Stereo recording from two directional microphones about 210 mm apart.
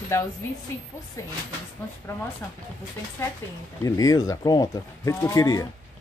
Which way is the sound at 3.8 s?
15° left (ahead or behind).